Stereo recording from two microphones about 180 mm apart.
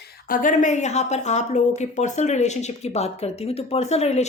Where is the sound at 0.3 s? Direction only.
50° left (ahead or behind).